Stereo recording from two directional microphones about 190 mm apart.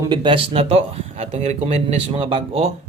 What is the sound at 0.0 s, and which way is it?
Speech, 25° right (ahead or behind).